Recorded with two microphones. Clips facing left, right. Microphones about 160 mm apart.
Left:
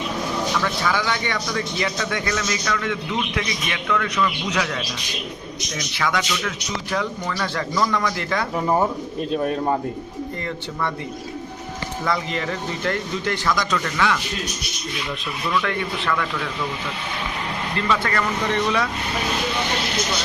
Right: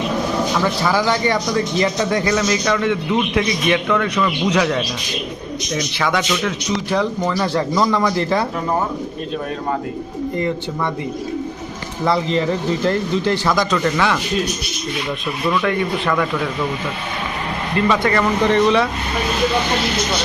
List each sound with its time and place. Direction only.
0.6 s speech: 35° right (ahead or behind)
4.2 s speech: 35° right (ahead or behind)
5.9 s speech: 30° right (ahead or behind)
12.0 s speech: 30° right (ahead or behind)
15.6 s speech: 15° right (ahead or behind)
17.8 s speech: 25° right (ahead or behind)